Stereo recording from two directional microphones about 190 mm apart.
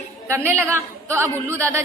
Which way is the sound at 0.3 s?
10° right (ahead or behind).